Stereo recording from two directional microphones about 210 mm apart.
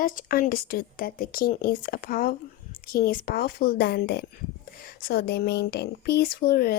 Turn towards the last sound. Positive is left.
turn(degrees=45)  # may be behind; listen again after turning